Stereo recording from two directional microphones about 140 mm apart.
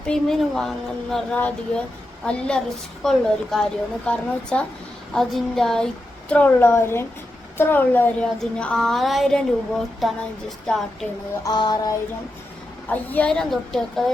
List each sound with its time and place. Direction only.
0.0 s speech: 5° left (ahead or behind)
3.0 s speech: 5° left (ahead or behind)
11.4 s music: 30° left (ahead or behind)
12.9 s speech: 10° left (ahead or behind)